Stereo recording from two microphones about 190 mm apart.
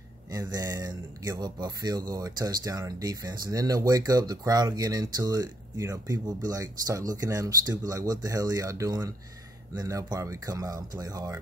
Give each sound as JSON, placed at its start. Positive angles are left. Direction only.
{"t": 0.3, "sound": "speech", "side_deg": -20}